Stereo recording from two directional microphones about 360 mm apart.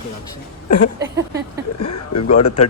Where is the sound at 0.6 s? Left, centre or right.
Left.